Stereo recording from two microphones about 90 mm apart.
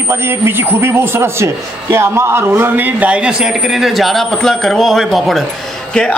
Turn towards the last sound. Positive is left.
turn(degrees=10)  # may be behind; listen again after turning